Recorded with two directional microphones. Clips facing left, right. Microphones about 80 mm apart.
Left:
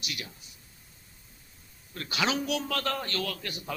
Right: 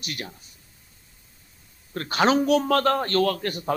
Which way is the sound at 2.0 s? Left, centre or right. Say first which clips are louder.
Right 9 dB; right.